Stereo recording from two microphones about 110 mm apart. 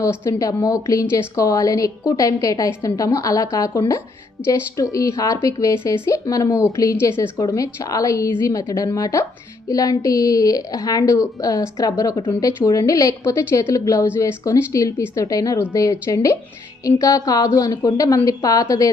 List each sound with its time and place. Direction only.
0.0 s a woman's voice: 25° left (ahead or behind)